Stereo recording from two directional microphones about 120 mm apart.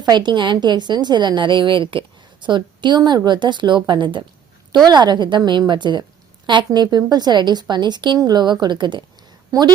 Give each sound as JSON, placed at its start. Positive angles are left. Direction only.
{"t": 0.0, "sound": "a woman's voice", "side_deg": -40}